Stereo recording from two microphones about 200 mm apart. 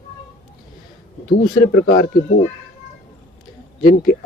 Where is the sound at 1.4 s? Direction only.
45° left (ahead or behind).